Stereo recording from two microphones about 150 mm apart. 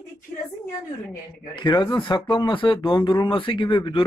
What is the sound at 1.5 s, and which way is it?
Speech, 30° left (ahead or behind).